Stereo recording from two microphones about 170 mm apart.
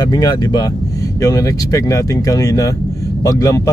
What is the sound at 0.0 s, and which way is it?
Speech, 25° left (ahead or behind).